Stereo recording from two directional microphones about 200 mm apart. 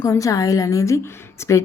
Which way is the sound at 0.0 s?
15° left (ahead or behind).